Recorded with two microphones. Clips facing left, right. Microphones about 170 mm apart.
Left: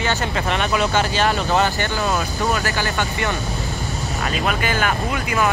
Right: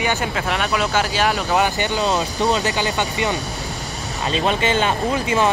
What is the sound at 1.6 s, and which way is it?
Speech, 15° right (ahead or behind).